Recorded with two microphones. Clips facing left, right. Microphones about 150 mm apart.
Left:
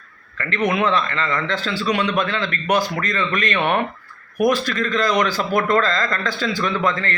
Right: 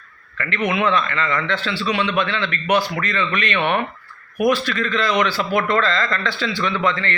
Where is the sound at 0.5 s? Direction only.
35° left (ahead or behind).